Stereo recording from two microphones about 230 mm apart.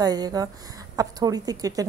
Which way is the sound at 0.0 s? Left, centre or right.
Centre.